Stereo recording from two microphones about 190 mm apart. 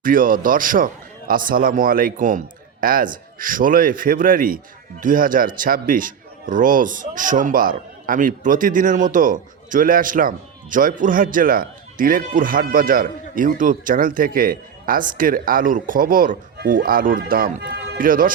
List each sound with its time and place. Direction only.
0.0 s a man's voice: 45° right (ahead or behind)